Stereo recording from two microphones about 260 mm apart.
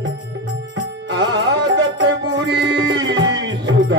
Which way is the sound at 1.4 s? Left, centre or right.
Right.